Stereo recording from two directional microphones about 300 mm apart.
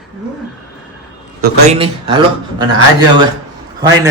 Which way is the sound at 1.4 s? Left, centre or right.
Centre.